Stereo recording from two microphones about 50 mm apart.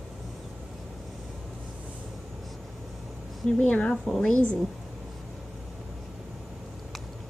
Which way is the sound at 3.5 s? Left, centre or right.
Left.